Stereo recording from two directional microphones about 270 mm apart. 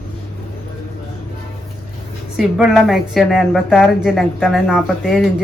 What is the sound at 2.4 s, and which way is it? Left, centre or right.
A woman's voice, centre.